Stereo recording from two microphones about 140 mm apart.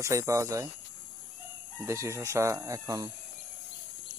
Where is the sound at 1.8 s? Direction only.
20° right (ahead or behind).